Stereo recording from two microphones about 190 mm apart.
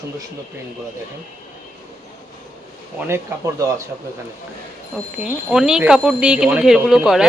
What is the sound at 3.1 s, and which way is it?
Speech, 15° right (ahead or behind).